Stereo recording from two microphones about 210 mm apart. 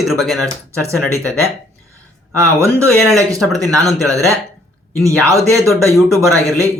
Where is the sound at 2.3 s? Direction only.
15° right (ahead or behind).